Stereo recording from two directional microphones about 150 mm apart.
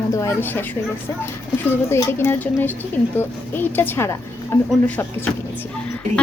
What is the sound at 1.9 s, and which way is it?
A woman's voice, 15° left (ahead or behind).